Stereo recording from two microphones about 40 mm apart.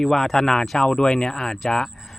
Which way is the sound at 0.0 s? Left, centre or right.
Centre.